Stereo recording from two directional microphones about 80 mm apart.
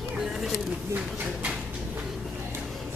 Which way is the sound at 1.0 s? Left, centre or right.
Centre.